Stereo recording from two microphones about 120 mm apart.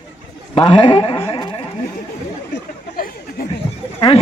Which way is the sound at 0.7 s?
45° left (ahead or behind).